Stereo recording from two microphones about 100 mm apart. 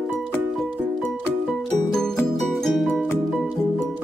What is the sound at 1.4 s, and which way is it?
Music, centre (ahead or behind).